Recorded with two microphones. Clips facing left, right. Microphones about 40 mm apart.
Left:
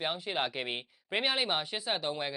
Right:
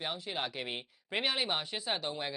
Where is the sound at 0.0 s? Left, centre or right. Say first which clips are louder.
Left 4 dB; left.